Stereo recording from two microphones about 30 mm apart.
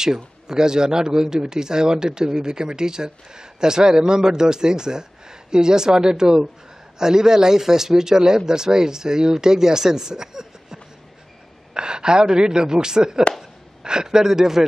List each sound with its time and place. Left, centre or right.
0.0 s a man's voice: right
11.7 s a man's voice: right